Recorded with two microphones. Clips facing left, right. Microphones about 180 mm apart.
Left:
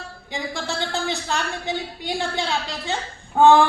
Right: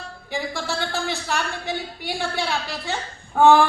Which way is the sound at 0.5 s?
20° left (ahead or behind).